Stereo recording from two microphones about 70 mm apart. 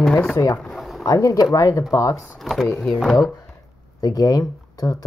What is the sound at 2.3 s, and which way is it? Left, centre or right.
Speech, centre.